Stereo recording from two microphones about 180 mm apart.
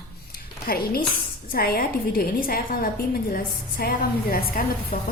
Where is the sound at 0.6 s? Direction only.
55° left (ahead or behind).